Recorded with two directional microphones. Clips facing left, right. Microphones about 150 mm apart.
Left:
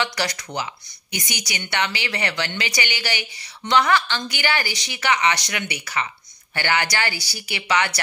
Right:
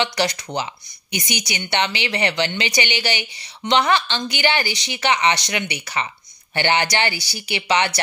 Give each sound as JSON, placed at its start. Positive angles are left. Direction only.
{"t": 0.0, "sound": "a woman's voice", "side_deg": -25}